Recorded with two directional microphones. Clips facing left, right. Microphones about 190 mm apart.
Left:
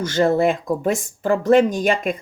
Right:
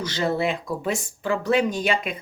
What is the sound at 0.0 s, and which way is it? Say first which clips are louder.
Speech: left 7 dB; 50° left (ahead or behind).